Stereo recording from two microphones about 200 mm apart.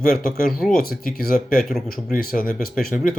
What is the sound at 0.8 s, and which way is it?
Speech, 45° left (ahead or behind).